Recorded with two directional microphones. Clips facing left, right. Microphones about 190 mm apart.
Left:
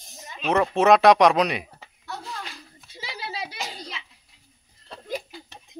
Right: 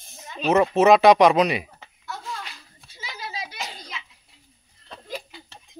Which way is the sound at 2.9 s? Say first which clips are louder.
Left 1 dB; 30° left (ahead or behind).